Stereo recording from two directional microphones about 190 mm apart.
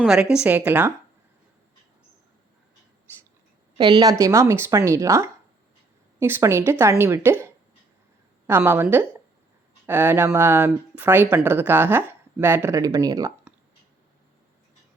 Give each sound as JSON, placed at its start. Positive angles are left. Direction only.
{"t": 0.0, "sound": "speech", "side_deg": -5}
{"t": 3.8, "sound": "speech", "side_deg": -20}